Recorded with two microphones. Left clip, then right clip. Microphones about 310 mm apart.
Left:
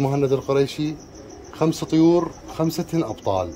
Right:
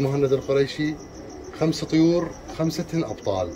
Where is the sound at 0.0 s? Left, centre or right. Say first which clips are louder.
Left 1 dB; left.